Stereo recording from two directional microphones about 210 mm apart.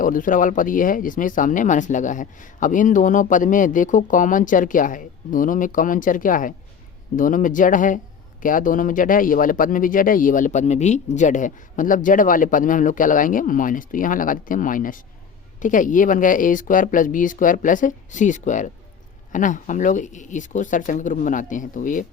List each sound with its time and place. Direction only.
0.0 s speech: 40° left (ahead or behind)